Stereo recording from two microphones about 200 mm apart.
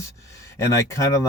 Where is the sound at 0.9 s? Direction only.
15° left (ahead or behind).